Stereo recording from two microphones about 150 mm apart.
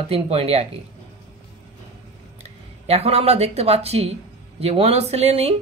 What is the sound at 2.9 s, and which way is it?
Speech, 40° right (ahead or behind).